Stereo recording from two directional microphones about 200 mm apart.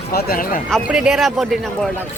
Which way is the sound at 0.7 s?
5° right (ahead or behind).